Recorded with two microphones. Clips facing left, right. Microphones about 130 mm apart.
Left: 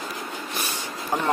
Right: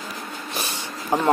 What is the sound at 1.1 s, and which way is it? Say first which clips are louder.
Speech: right 4 dB; 20° right (ahead or behind).